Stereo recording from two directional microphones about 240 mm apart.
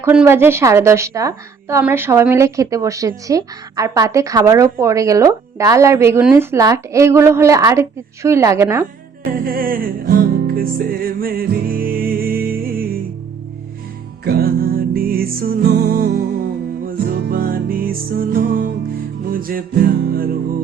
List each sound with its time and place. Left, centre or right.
0.0 s a woman's voice: centre
9.4 s music: right
14.3 s music: right